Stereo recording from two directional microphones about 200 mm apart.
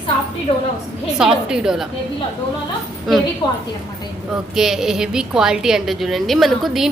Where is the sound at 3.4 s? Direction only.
20° left (ahead or behind).